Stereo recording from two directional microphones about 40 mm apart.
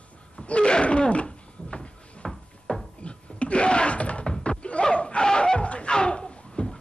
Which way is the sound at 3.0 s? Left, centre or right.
Left.